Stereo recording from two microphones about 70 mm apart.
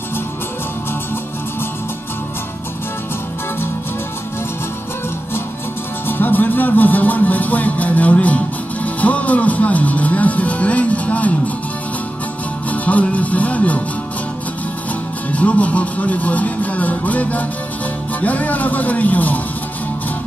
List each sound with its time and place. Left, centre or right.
6.0 s speech: left
12.6 s speech: left
15.3 s speech: left